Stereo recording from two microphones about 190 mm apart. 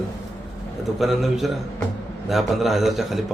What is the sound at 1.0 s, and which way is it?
Speech, centre (ahead or behind).